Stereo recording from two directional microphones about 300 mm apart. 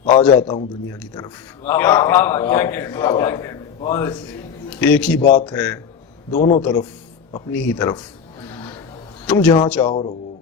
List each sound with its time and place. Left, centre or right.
0.0 s a man's voice: centre
4.8 s a man's voice: centre
5.3 s speech: left
5.5 s a man's voice: centre
9.2 s a man's voice: centre
9.8 s speech: left